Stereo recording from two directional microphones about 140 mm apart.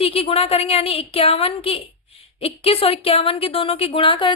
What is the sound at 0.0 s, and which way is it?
A woman's voice, 40° left (ahead or behind).